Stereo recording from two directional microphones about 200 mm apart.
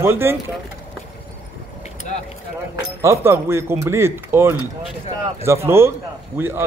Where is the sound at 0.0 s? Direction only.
10° right (ahead or behind).